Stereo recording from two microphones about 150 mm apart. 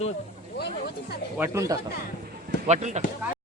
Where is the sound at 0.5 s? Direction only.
90° left.